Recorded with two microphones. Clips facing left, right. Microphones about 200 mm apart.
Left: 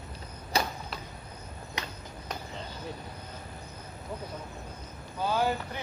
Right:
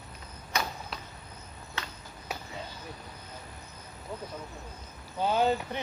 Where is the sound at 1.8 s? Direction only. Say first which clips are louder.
Left 1 dB; 15° left (ahead or behind).